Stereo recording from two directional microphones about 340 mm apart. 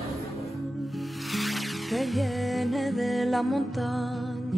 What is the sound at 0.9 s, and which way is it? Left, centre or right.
Music, centre.